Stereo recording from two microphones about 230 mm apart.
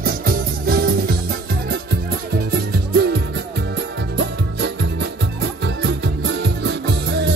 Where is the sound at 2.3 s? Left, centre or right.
Right.